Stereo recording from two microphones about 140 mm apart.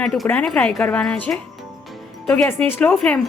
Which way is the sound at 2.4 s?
15° left (ahead or behind).